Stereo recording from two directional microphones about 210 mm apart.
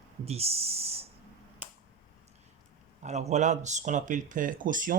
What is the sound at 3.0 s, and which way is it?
Speech, 35° right (ahead or behind).